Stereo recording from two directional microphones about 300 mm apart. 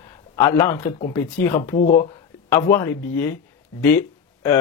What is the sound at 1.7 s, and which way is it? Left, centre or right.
Speech, left.